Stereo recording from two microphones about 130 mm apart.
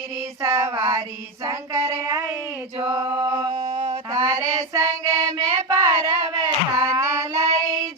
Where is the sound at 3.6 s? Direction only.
55° right (ahead or behind).